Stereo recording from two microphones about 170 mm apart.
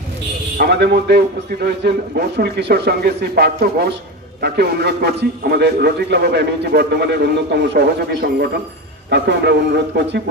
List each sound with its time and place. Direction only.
0.6 s a man's voice: 75° right (ahead or behind)